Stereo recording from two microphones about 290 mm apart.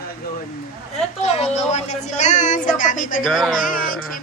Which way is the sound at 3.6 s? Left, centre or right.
Left.